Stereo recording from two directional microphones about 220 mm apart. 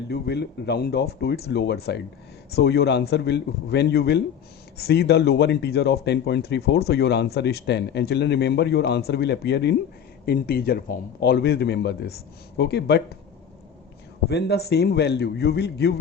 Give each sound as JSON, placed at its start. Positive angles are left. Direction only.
{"t": 0.1, "sound": "speech", "side_deg": 50}
{"t": 14.3, "sound": "speech", "side_deg": 50}